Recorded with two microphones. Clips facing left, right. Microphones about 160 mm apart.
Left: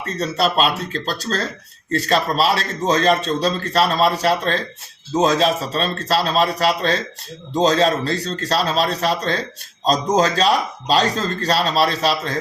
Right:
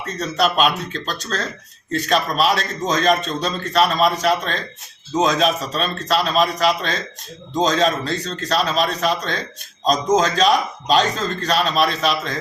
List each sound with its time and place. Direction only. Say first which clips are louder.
0.2 s a man's voice: even; 35° left (ahead or behind)